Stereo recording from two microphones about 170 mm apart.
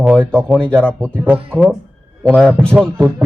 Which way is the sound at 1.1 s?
10° right (ahead or behind).